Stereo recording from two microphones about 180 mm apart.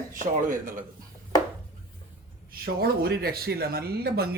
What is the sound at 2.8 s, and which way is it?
Speech, 60° right (ahead or behind).